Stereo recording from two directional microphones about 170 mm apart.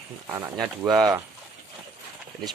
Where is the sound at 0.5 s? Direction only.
Centre (ahead or behind).